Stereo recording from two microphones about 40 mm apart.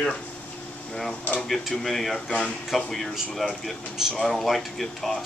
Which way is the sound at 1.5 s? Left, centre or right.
Centre.